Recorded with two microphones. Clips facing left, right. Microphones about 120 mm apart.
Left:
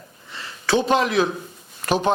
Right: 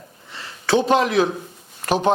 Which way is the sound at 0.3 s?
40° right (ahead or behind).